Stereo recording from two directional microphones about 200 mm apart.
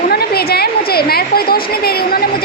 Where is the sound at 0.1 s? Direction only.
50° left (ahead or behind).